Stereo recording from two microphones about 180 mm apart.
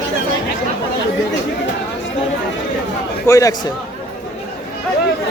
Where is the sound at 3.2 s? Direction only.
20° left (ahead or behind).